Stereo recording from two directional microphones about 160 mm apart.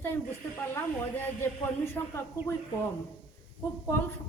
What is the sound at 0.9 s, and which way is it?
A woman's voice, 15° left (ahead or behind).